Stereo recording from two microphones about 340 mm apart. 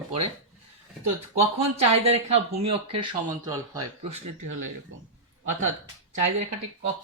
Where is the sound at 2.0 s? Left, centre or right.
Right.